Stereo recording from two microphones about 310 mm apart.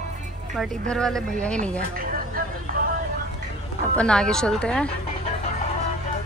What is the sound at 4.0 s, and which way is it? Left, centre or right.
Speech, centre.